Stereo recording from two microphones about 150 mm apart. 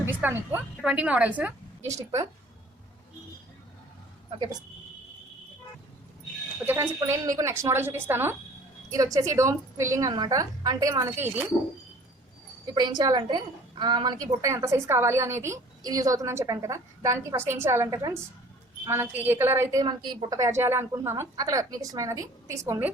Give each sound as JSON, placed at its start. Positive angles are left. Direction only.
{"t": 0.0, "sound": "a woman's voice", "side_deg": -15}
{"t": 1.9, "sound": "a woman's voice", "side_deg": -20}
{"t": 6.7, "sound": "a woman's voice", "side_deg": -20}
{"t": 12.7, "sound": "a woman's voice", "side_deg": -25}
{"t": 19.8, "sound": "a woman's voice", "side_deg": -30}